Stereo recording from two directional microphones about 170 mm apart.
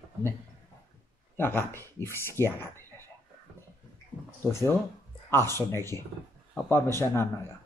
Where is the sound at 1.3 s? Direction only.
15° left (ahead or behind).